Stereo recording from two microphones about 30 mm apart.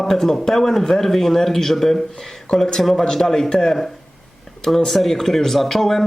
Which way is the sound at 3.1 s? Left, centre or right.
Centre.